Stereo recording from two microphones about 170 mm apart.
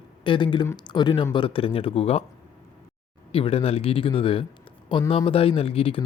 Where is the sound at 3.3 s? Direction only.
35° left (ahead or behind).